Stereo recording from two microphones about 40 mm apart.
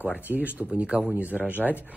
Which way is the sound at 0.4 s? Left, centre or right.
Right.